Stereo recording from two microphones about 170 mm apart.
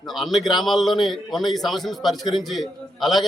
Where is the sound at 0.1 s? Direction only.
Centre (ahead or behind).